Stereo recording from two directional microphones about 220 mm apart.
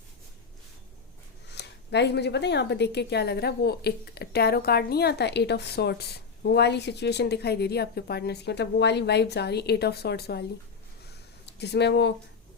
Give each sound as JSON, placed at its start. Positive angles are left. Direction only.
{"t": 1.5, "sound": "speech", "side_deg": 50}
{"t": 11.4, "sound": "speech", "side_deg": 50}